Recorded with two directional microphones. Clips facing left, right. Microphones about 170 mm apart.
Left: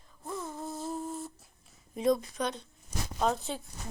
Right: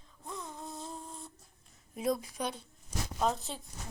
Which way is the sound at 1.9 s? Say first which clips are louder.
Left 5 dB; 5° right (ahead or behind).